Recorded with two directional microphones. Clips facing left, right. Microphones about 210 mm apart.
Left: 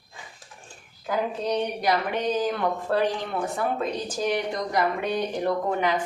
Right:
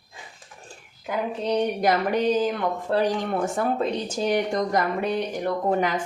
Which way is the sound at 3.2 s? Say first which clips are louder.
Right 3 dB; 45° right (ahead or behind).